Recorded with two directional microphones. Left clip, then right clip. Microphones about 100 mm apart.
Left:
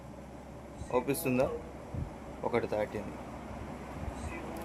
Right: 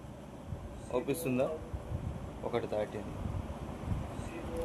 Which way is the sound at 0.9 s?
55° left (ahead or behind).